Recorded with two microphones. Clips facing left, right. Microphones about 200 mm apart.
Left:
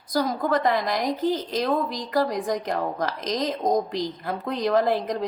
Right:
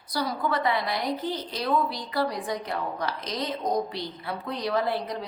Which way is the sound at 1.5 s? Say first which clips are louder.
Left 2 dB; 45° left (ahead or behind).